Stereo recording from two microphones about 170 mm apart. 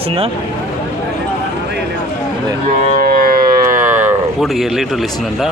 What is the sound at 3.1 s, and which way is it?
Civil defense siren, 55° right (ahead or behind).